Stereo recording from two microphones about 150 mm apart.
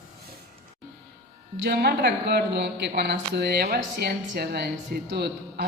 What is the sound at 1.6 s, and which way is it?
A man's voice, 90° right.